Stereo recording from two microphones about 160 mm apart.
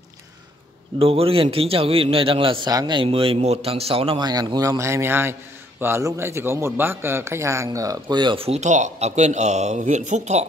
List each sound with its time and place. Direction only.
0.9 s a man's voice: 35° right (ahead or behind)